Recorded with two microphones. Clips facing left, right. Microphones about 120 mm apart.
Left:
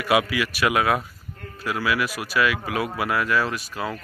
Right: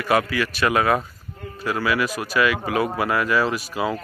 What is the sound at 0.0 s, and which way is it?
A man's voice, 10° left (ahead or behind).